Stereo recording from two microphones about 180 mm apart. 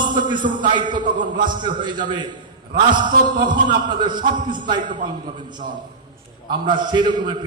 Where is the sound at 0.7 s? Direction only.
25° right (ahead or behind).